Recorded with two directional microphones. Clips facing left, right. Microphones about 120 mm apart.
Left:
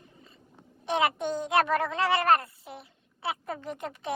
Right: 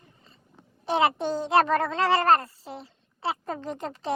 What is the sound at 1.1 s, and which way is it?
Speech, 30° right (ahead or behind).